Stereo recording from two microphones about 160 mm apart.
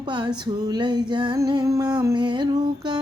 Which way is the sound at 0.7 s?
25° right (ahead or behind).